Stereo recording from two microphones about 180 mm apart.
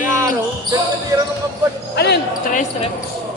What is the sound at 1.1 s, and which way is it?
Speech, 15° right (ahead or behind).